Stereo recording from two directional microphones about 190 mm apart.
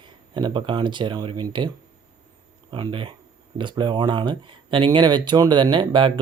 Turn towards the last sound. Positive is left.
turn(degrees=-25)  # may be behind; listen again after turning